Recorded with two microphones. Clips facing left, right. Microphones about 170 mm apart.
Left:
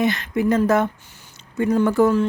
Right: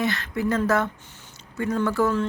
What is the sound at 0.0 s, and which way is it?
Speech, 20° left (ahead or behind).